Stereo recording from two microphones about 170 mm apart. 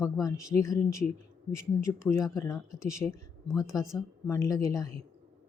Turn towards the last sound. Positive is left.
turn(degrees=20)  # may be behind; listen again after turning